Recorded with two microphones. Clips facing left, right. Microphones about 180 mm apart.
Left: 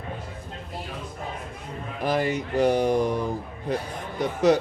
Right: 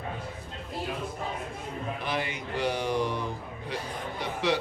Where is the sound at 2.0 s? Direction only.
45° left (ahead or behind).